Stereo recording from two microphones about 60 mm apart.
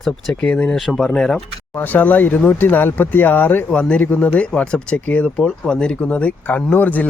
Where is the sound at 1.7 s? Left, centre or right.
Left.